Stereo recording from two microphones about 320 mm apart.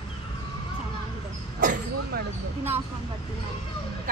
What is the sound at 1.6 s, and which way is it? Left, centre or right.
Speech, right.